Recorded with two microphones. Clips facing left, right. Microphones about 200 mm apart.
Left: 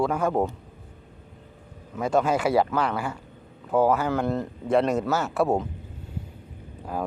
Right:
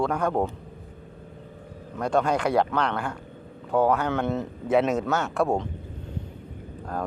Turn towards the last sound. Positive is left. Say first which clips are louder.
# left 1 dB
turn(degrees=5)  # may be behind; listen again after turning